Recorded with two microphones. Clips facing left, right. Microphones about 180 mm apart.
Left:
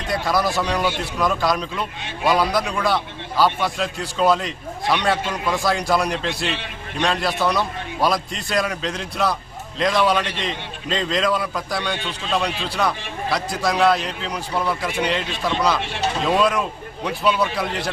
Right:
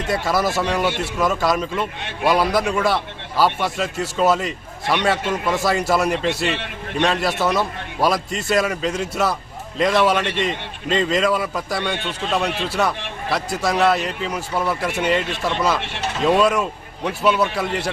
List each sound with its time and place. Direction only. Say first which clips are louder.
0.1 s a man's voice: even; 5° right (ahead or behind)
11.9 s speech: right 3 dB; 60° right (ahead or behind)
12.6 s a man's voice: right 2 dB; 5° right (ahead or behind)